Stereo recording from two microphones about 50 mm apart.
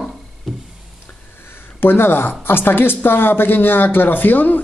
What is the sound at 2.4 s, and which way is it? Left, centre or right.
Speech, left.